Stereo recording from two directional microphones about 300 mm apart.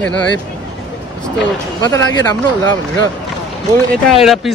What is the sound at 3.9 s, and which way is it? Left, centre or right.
Speech, centre.